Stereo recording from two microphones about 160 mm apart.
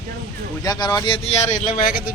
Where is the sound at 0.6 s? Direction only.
25° left (ahead or behind); by 2.1 s 60° left (ahead or behind).